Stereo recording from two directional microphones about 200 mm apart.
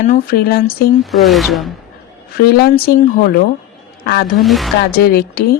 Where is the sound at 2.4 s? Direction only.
50° left (ahead or behind).